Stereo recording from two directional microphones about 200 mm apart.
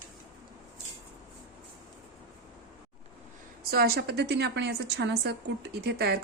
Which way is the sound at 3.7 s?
55° right (ahead or behind).